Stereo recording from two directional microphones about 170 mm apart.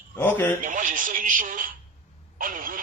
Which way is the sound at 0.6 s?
50° right (ahead or behind).